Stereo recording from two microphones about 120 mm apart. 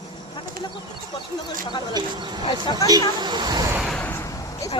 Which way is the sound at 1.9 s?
35° right (ahead or behind).